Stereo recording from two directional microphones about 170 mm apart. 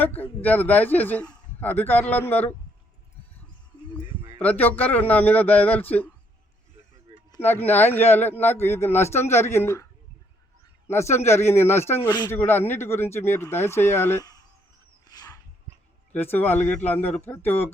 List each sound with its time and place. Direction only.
0.0 s a man's voice: 10° left (ahead or behind)
4.4 s a man's voice: 10° left (ahead or behind)
7.4 s a man's voice: 10° left (ahead or behind)
10.8 s a man's voice: 15° left (ahead or behind)
15.0 s dog: 25° left (ahead or behind)
16.1 s a man's voice: 10° left (ahead or behind)